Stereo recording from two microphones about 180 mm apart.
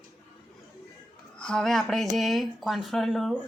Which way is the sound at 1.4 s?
5° left (ahead or behind).